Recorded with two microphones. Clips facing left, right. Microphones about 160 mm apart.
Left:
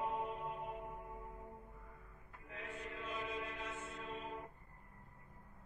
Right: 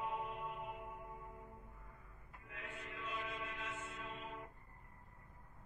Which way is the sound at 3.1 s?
35° left (ahead or behind).